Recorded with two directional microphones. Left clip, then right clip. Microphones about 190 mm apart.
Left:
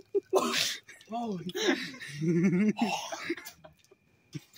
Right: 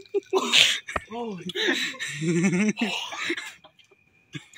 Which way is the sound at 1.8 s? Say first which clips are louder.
Right 9 dB; 5° left (ahead or behind).